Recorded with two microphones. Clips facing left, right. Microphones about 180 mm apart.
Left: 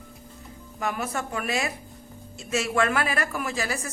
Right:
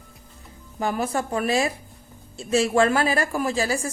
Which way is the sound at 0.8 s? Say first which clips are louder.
Right 5 dB; 30° right (ahead or behind).